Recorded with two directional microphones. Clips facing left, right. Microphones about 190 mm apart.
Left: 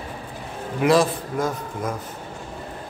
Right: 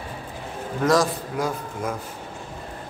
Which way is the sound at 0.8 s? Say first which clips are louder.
Left 2 dB; 10° left (ahead or behind).